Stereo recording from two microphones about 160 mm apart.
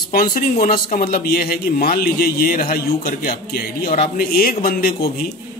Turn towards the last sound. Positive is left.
turn(degrees=75)  # may be behind; listen again after turning